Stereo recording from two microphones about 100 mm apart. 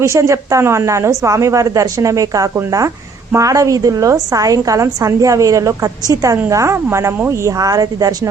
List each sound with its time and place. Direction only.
0.0 s a woman's voice: 30° right (ahead or behind)